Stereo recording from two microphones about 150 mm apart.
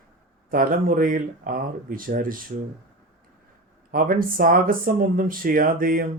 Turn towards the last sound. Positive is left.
turn(degrees=-70)  # may be behind; listen again after turning